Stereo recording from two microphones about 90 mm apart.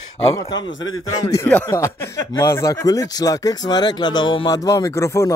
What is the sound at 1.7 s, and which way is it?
Speech, 30° left (ahead or behind).